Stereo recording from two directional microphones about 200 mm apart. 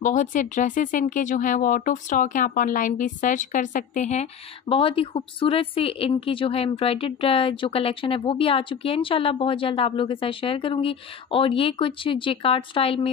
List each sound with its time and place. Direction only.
0.0 s speech: 40° left (ahead or behind)